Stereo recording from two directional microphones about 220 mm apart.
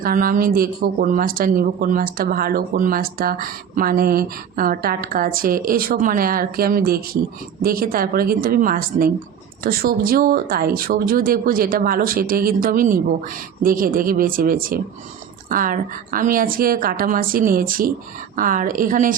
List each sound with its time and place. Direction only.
0.0 s speech: 40° right (ahead or behind)